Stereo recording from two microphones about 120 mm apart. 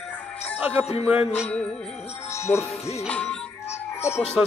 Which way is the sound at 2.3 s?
25° left (ahead or behind).